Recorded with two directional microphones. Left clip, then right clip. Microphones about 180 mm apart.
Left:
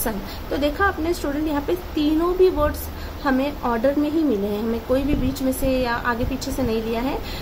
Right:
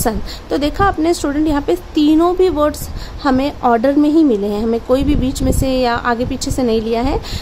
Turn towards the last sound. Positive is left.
turn(degrees=-55)  # may be behind; listen again after turning